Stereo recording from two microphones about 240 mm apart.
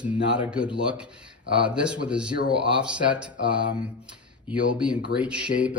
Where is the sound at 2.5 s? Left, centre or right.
Right.